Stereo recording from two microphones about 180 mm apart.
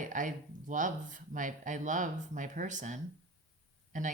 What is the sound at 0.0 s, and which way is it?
Speech, 45° right (ahead or behind).